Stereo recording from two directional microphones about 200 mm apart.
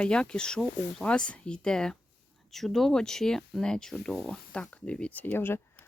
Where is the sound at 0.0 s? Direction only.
5° left (ahead or behind).